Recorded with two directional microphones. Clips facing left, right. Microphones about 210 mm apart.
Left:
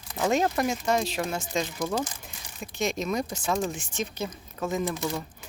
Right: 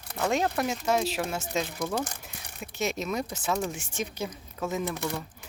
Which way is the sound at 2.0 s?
65° right (ahead or behind).